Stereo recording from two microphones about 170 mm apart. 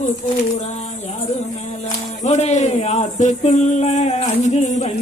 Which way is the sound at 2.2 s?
40° left (ahead or behind).